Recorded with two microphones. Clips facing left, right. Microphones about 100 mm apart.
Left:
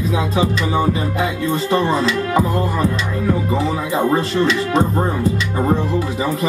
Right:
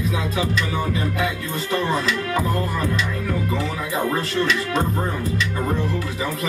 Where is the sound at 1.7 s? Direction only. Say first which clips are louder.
Left 3 dB; 30° left (ahead or behind).